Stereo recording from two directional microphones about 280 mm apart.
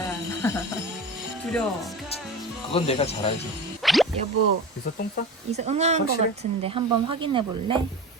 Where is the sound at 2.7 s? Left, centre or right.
Left.